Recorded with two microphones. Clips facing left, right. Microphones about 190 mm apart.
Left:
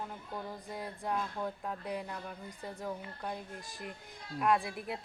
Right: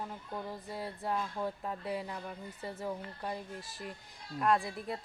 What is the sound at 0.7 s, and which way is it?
A woman's voice, 5° right (ahead or behind).